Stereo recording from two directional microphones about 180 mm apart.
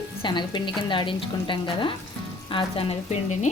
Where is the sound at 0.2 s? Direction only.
25° left (ahead or behind).